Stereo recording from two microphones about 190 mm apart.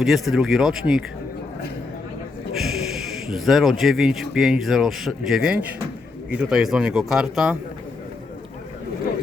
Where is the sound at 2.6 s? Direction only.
Centre (ahead or behind).